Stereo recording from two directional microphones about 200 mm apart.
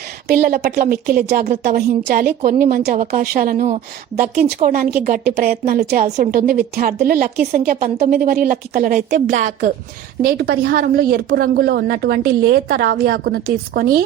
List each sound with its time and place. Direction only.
0.3 s speech: 45° right (ahead or behind)
10.2 s speech: 50° right (ahead or behind)